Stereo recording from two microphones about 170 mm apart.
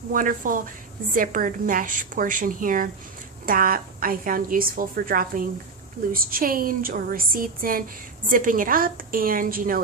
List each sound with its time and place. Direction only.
0.1 s a woman's voice: 55° right (ahead or behind)